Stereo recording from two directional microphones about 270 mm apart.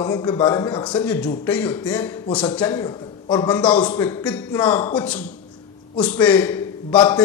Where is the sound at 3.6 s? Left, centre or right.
Centre.